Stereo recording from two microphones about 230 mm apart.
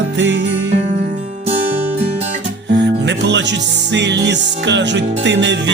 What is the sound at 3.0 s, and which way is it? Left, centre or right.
Music, right.